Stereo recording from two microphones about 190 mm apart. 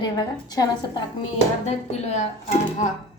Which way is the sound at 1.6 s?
35° left (ahead or behind).